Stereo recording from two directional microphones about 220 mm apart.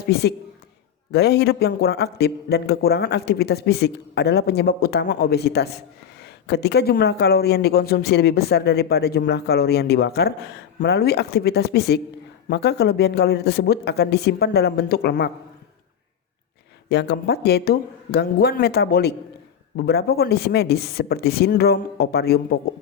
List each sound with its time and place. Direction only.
0.0 s speech: 45° left (ahead or behind)
16.9 s speech: 50° left (ahead or behind)